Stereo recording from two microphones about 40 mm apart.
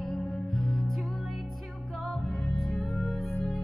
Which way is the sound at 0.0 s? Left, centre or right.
Centre.